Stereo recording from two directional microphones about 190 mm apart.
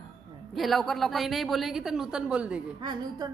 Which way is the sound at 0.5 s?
Centre (ahead or behind).